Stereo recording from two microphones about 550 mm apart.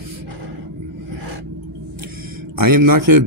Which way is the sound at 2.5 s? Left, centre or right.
Right.